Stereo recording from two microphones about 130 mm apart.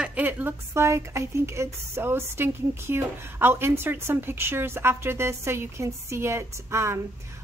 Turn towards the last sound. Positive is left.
turn(degrees=-20)  # may be behind; listen again after turning